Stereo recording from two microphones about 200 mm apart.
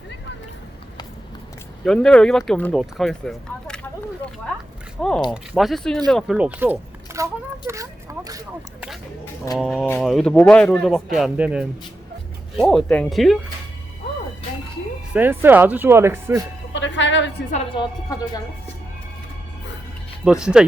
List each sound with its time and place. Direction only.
1.8 s speech: 5° left (ahead or behind)
4.9 s speech: 5° left (ahead or behind); by 7.3 s 10° right (ahead or behind)
7.7 s a sound: 15° right (ahead or behind)
9.6 s speech: centre (ahead or behind)
15.1 s speech: 10° right (ahead or behind)
16.7 s a woman's voice: 65° left (ahead or behind)
17.7 s speech: 20° left (ahead or behind)
20.2 s speech: 5° right (ahead or behind)